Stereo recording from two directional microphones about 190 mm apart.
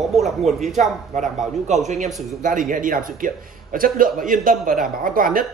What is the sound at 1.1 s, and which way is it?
A man's voice, 40° right (ahead or behind).